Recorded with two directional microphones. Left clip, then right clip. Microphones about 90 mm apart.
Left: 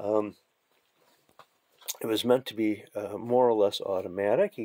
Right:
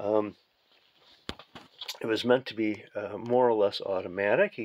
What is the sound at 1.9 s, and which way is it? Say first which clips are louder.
Speech: even; 25° left (ahead or behind).